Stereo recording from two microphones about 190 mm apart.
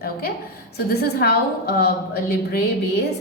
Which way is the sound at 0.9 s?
55° left (ahead or behind).